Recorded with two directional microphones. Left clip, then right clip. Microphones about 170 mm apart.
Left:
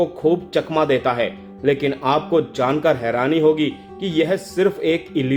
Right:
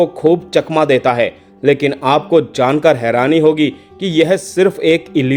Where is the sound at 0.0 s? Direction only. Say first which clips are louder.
Right 6 dB; 40° right (ahead or behind).